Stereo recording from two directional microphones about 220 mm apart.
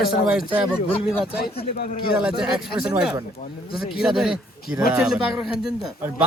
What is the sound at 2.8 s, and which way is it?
Speech, 5° right (ahead or behind).